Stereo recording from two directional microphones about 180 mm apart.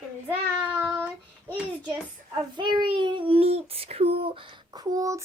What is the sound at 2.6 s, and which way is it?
Child singing, 25° right (ahead or behind).